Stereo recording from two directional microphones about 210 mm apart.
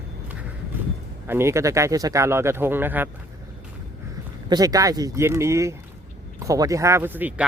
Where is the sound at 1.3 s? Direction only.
10° right (ahead or behind).